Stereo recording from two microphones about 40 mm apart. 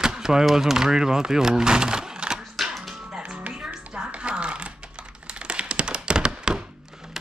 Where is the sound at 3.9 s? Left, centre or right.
Right.